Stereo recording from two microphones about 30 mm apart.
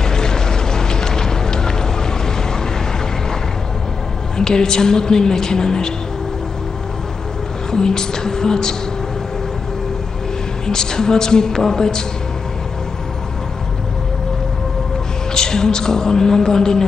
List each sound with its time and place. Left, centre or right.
0.0 s music: left
4.4 s a woman's voice: left
7.7 s a woman's voice: left
10.7 s a woman's voice: centre
15.3 s a woman's voice: left